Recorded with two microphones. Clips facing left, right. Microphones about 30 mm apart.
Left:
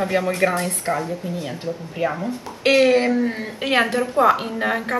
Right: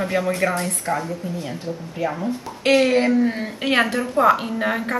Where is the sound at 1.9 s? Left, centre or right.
Centre.